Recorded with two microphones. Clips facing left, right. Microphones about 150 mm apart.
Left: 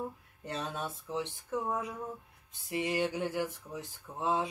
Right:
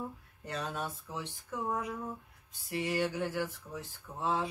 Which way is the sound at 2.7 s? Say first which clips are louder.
Left 1 dB; 20° left (ahead or behind).